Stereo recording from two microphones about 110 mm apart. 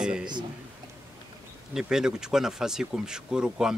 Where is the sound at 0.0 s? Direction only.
5° right (ahead or behind).